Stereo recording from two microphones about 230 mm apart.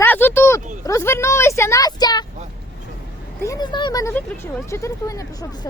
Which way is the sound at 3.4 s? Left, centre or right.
Centre.